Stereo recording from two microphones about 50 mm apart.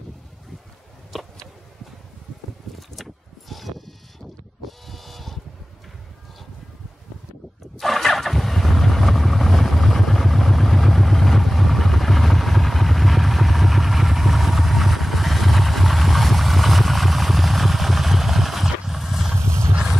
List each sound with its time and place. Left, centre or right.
3.0 s mechanisms: centre
4.6 s vehicle: centre
7.7 s vehicle: centre
19.3 s a sound: right